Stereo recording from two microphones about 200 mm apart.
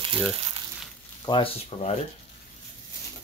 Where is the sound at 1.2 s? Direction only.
25° left (ahead or behind).